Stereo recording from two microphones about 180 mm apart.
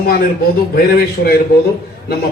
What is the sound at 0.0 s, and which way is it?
Speech, 55° left (ahead or behind).